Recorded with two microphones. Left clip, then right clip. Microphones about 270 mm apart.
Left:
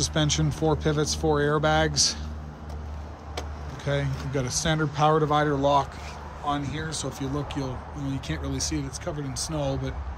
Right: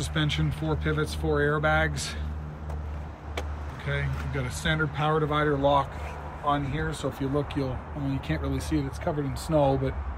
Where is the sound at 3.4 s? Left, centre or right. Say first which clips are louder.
Even; centre.